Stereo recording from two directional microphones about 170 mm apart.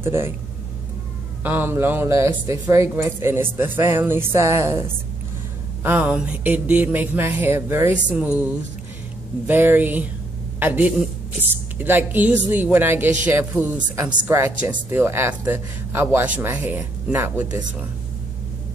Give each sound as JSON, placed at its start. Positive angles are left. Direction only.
{"t": 0.0, "sound": "speech", "side_deg": -15}
{"t": 1.4, "sound": "speech", "side_deg": -10}